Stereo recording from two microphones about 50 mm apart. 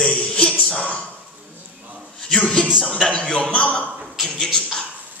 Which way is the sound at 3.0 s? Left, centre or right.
Left.